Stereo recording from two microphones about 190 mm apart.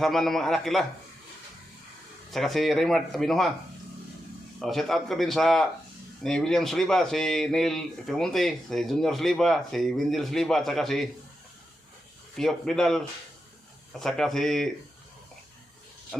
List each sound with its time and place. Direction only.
0.0 s a man's voice: centre (ahead or behind)
2.3 s a man's voice: centre (ahead or behind)
4.6 s a man's voice: centre (ahead or behind)
12.4 s a man's voice: centre (ahead or behind)
14.0 s a man's voice: 5° left (ahead or behind)